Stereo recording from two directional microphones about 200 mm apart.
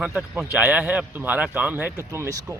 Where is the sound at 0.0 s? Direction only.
5° right (ahead or behind).